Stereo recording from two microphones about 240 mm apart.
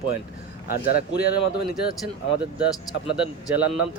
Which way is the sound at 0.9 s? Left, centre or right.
Left.